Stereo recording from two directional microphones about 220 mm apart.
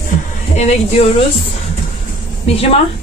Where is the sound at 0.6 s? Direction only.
30° left (ahead or behind).